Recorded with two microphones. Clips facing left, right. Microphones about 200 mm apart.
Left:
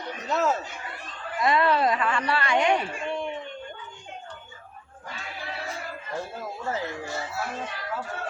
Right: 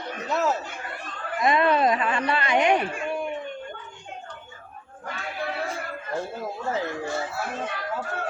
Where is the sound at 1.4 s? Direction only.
20° right (ahead or behind).